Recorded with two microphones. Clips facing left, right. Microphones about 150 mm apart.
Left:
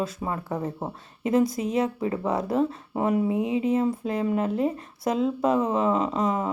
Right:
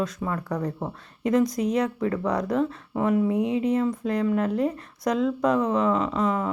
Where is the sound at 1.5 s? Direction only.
5° left (ahead or behind).